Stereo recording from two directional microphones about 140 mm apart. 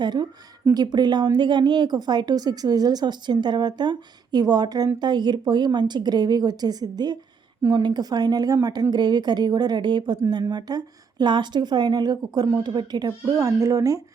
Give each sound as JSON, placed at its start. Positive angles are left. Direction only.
{"t": 0.0, "sound": "a woman's voice", "side_deg": -30}